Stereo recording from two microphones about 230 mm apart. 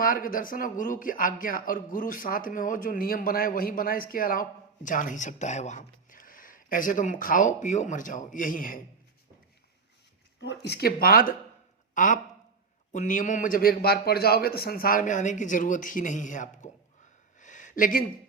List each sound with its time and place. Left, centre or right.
0.0 s speech: left
10.4 s speech: left
17.4 s a sound: left